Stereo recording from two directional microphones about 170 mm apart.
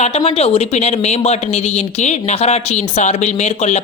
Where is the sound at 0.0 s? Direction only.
40° left (ahead or behind).